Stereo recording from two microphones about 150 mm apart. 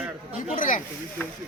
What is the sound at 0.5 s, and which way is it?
Speech, 60° left (ahead or behind).